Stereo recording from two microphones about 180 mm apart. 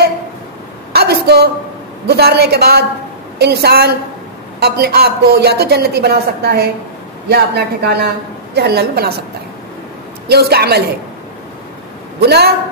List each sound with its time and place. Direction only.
0.9 s a sound: 65° right (ahead or behind)
2.0 s a woman's voice: 60° right (ahead or behind)
10.2 s a woman's voice: 65° right (ahead or behind)
12.2 s a woman's voice: 65° right (ahead or behind)